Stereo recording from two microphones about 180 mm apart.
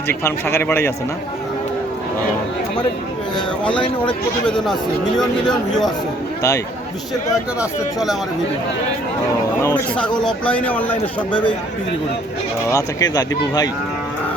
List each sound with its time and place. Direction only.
0.1 s speech: 15° left (ahead or behind)
4.0 s speech: 5° left (ahead or behind)
7.6 s speech: centre (ahead or behind)
9.6 s speech: 15° left (ahead or behind)
11.0 s speech: 25° left (ahead or behind)
12.7 s speech: 20° left (ahead or behind)